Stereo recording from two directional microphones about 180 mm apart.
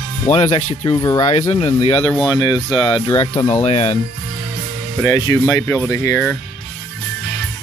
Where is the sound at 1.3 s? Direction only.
40° left (ahead or behind).